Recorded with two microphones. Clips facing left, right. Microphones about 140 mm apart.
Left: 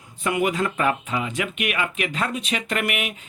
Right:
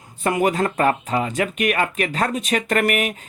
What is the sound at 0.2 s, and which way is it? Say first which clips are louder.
Speech: right 3 dB; 40° right (ahead or behind).